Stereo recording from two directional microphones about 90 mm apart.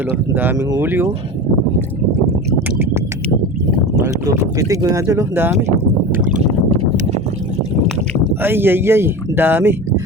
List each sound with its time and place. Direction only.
0.3 s speech: 25° right (ahead or behind)
2.6 s a sound: 25° right (ahead or behind)
4.0 s speech: 40° right (ahead or behind)
8.4 s speech: 25° right (ahead or behind)